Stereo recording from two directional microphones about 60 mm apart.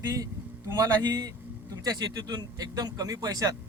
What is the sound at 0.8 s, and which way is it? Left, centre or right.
Speech, right.